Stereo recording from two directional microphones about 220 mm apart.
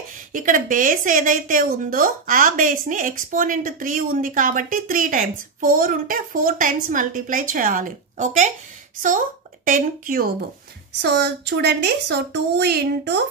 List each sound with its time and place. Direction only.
0.3 s a woman's voice: 35° right (ahead or behind)
9.7 s a woman's voice: 40° right (ahead or behind)
10.9 s a woman's voice: 50° right (ahead or behind)